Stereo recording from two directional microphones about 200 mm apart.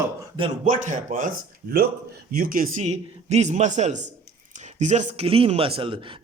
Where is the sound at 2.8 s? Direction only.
35° right (ahead or behind).